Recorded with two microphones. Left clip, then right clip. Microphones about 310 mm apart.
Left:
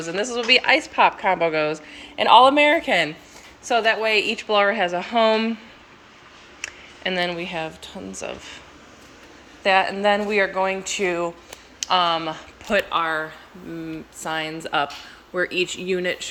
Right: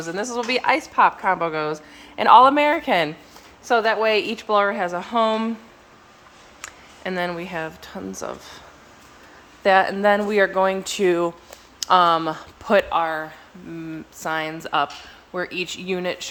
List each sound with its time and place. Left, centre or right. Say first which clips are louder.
0.0 s a woman's voice: left 1 dB; centre
6.6 s speech: left 5 dB; centre
9.6 s speech: right 2 dB; right
12.9 s speech: even; centre